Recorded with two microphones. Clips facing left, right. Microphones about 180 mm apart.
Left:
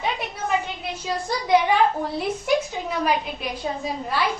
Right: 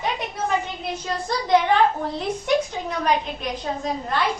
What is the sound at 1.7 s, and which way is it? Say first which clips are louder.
A woman's voice: right 1 dB; 10° left (ahead or behind).